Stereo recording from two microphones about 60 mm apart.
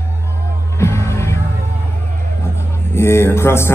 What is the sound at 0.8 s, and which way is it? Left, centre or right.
Music, left.